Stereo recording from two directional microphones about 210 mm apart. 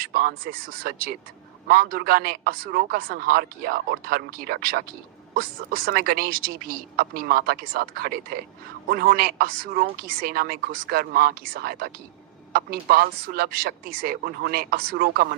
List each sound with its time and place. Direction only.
0.1 s a man's voice: 45° right (ahead or behind)